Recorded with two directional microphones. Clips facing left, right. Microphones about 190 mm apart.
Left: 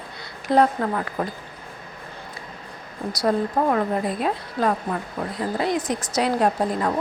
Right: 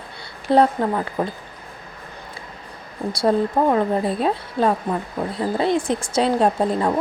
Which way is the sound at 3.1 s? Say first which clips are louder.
Right 3 dB; 25° right (ahead or behind).